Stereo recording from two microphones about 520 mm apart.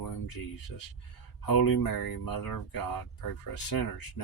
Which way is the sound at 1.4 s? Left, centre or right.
Left.